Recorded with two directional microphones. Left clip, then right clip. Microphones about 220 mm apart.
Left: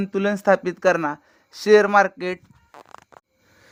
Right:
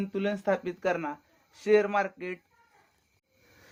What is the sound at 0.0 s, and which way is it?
Speech, 50° left (ahead or behind).